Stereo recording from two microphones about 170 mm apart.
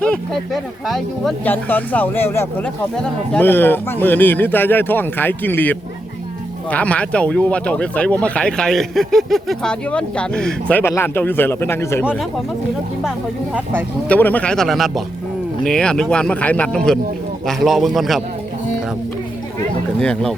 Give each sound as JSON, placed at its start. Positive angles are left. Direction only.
{"t": 0.0, "sound": "speech", "side_deg": 0}
{"t": 1.5, "sound": "speech", "side_deg": 10}
{"t": 13.1, "sound": "speech", "side_deg": -5}
{"t": 14.1, "sound": "speech", "side_deg": 10}
{"t": 20.0, "sound": "speech", "side_deg": 5}